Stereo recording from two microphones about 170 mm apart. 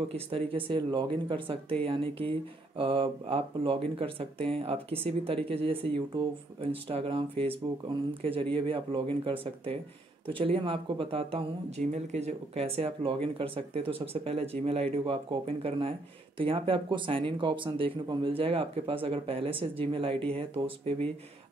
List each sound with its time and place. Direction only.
0.1 s speech: 35° right (ahead or behind)